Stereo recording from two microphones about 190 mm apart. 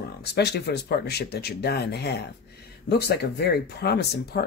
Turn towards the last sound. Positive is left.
turn(degrees=60)  # may be behind; listen again after turning